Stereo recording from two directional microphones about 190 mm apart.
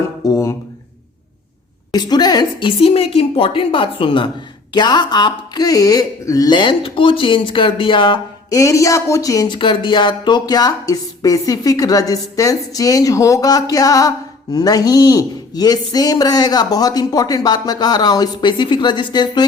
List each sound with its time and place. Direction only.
0.3 s speech: 15° left (ahead or behind)
1.9 s speech: 20° left (ahead or behind)